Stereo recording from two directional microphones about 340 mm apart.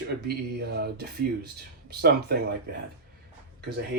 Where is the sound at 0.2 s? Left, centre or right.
Right.